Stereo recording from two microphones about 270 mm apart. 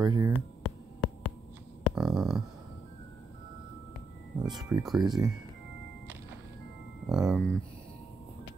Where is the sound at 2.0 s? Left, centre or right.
Centre.